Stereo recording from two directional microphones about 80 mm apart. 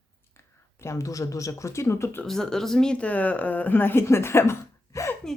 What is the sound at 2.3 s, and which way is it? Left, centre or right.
Speech, centre.